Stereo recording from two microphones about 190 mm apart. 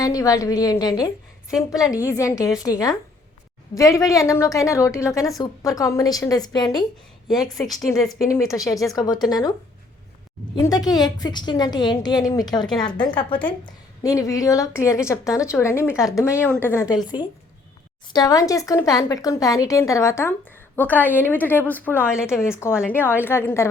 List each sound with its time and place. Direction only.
0.0 s a woman's voice: 20° left (ahead or behind)
7.3 s a woman's voice: centre (ahead or behind)
8.2 s a woman's voice: 15° left (ahead or behind)
10.5 s a woman's voice: 20° left (ahead or behind)
22.1 s a woman's voice: 5° right (ahead or behind)
22.4 s a woman's voice: 15° left (ahead or behind)